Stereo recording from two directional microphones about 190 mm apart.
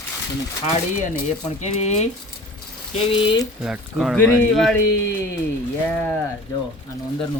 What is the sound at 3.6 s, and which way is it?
Speech, centre (ahead or behind).